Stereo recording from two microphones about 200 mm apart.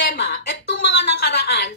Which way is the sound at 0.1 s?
55° left (ahead or behind).